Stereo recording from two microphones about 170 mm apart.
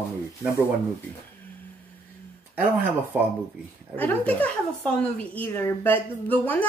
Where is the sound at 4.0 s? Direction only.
10° left (ahead or behind).